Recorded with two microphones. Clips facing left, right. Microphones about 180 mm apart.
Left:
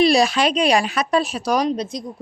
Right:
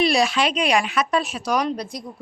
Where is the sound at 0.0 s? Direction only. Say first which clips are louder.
Left 4 dB; 35° left (ahead or behind).